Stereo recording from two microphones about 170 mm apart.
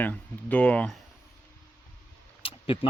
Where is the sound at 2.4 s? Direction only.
30° left (ahead or behind).